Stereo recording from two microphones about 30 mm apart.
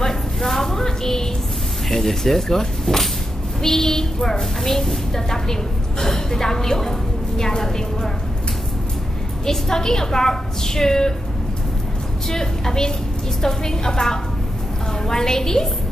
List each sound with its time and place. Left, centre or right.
0.0 s a sound: centre
1.9 s a woman's voice: centre
9.5 s a woman's voice: centre
12.3 s a woman's voice: centre